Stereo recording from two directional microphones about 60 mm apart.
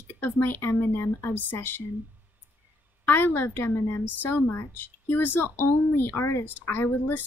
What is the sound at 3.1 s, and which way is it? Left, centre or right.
Speech, left.